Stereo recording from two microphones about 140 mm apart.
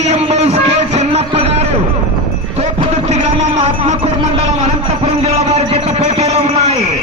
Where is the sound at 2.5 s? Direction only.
50° right (ahead or behind).